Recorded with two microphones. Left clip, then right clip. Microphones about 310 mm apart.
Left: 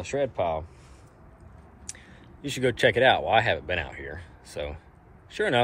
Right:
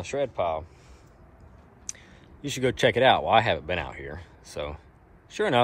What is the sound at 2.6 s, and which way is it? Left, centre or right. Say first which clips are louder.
Speech: even; right.